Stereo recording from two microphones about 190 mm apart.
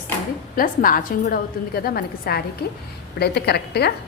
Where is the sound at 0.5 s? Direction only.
45° left (ahead or behind).